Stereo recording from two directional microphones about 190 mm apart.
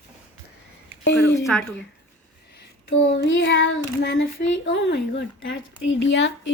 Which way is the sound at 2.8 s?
75° left (ahead or behind).